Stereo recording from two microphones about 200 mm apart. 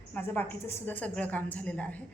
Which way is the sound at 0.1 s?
10° left (ahead or behind).